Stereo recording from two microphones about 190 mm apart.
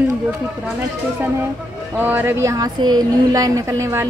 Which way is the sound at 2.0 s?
10° right (ahead or behind).